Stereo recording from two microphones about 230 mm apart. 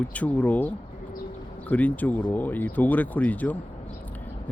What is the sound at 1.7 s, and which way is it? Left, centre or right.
Speech, centre.